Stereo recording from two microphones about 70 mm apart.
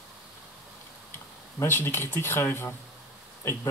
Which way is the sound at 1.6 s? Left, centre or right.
Left.